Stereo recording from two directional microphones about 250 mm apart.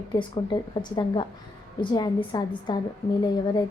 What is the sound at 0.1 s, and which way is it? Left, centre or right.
A woman's voice, centre.